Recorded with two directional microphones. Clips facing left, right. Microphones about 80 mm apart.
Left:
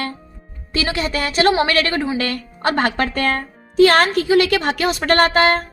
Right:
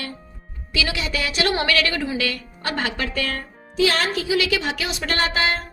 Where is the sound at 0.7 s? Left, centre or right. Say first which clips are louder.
Left 4 dB; left.